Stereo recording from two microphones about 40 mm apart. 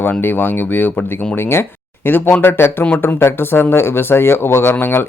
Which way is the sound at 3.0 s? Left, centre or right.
Left.